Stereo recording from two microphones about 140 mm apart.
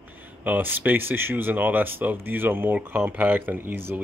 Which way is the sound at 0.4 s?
15° right (ahead or behind).